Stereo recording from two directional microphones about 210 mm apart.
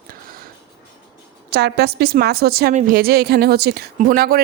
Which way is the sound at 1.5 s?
50° right (ahead or behind).